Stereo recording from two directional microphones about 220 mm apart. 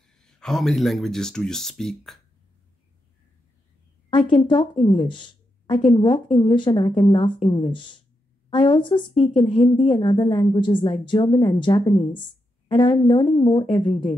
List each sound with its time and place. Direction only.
0.2 s speech: centre (ahead or behind)
4.1 s a woman's voice: 20° left (ahead or behind)